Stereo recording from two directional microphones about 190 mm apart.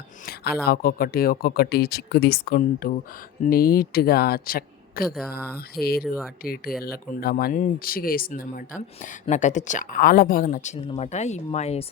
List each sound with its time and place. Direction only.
0.6 s speech: 50° left (ahead or behind); by 11.9 s 35° left (ahead or behind)